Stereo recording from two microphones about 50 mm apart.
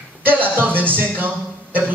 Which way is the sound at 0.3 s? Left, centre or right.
Right.